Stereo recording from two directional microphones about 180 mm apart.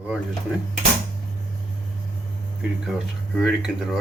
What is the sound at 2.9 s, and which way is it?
Speech, centre (ahead or behind).